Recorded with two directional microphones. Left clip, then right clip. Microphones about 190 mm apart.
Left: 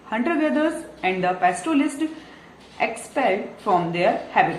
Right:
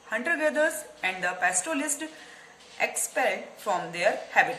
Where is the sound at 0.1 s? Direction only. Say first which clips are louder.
Left 4 dB; 40° right (ahead or behind).